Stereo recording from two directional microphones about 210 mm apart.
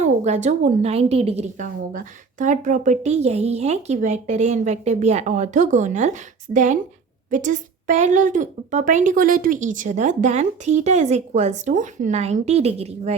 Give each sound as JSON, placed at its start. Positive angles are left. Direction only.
{"t": 0.0, "sound": "speech", "side_deg": -35}